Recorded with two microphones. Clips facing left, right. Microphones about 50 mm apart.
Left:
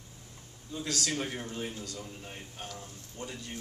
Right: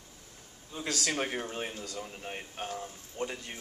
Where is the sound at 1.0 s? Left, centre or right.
Right.